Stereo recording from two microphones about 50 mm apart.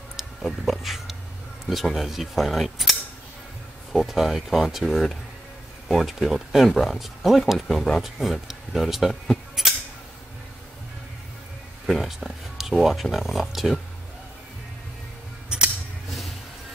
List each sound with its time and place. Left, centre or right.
0.4 s speech: centre
9.6 s a sound: centre
11.8 s speech: centre
15.5 s scissors: centre